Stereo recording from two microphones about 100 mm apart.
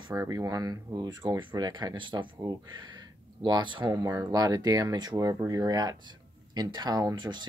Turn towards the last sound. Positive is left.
turn(degrees=-50)  # may be behind; listen again after turning